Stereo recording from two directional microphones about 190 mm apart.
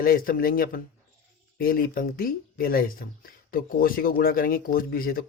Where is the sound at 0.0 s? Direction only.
50° left (ahead or behind).